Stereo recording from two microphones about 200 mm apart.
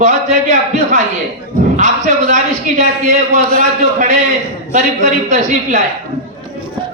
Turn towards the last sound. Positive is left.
turn(degrees=-35)  # may be behind; listen again after turning